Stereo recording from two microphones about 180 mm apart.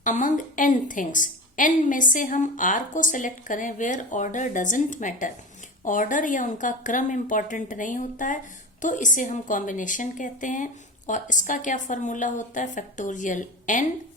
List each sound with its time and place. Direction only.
0.0 s a woman's voice: 45° left (ahead or behind)